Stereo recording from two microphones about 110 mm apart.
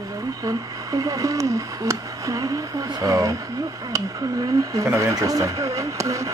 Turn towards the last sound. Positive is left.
turn(degrees=-30)  # may be behind; listen again after turning